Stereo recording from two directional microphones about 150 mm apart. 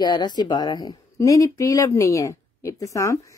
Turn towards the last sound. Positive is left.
turn(degrees=20)  # may be behind; listen again after turning